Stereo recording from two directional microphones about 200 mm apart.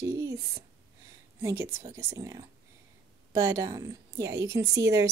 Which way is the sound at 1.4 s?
15° right (ahead or behind).